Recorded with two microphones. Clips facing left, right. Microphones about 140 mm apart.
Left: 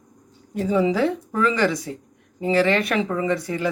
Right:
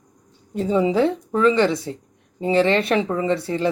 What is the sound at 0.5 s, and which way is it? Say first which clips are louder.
Speech: right 2 dB; 25° right (ahead or behind).